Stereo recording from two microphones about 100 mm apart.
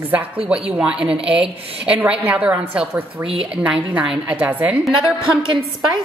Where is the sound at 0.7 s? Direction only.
10° right (ahead or behind).